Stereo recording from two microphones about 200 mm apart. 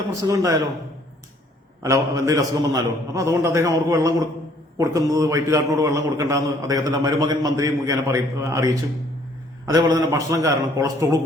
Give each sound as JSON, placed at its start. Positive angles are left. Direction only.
{"t": 0.1, "sound": "a man's voice", "side_deg": -15}
{"t": 1.8, "sound": "a man's voice", "side_deg": -15}